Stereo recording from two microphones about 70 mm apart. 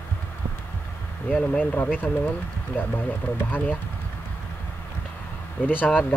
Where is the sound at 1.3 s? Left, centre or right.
Left.